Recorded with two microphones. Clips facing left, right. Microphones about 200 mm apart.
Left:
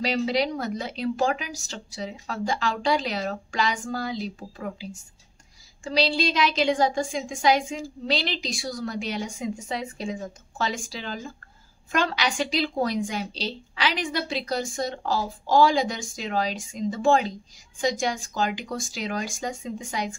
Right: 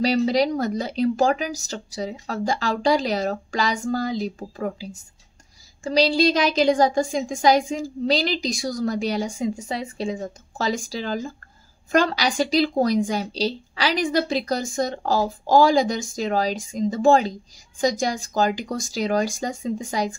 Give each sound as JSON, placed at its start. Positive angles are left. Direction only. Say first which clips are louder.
{"t": 0.0, "sound": "a woman's voice", "louder": "right 5 dB", "side_deg": -40}
{"t": 5.9, "sound": "a woman's voice", "louder": "right 6 dB", "side_deg": -40}